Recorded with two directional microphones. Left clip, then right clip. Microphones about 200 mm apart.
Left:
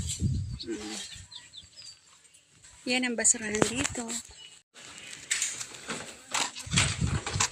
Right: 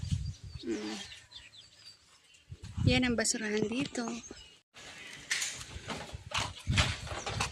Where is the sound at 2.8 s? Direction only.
5° right (ahead or behind).